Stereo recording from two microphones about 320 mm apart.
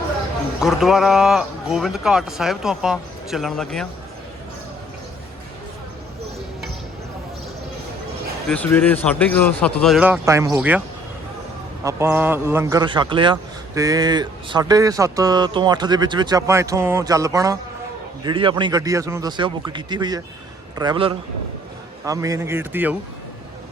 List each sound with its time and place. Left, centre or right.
0.6 s a man's voice: centre
8.4 s a man's voice: centre